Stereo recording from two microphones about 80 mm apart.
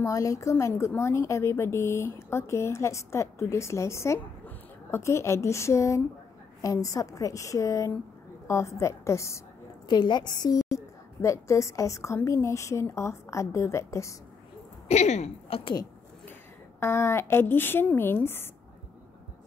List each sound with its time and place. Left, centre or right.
0.0 s a woman's voice: left
9.8 s a woman's voice: left
11.1 s a woman's voice: left
16.8 s a woman's voice: left